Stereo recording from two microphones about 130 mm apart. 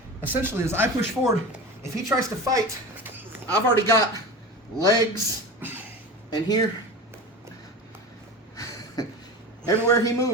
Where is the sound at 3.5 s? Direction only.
15° left (ahead or behind).